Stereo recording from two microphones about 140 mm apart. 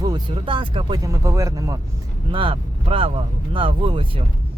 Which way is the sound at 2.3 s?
40° right (ahead or behind).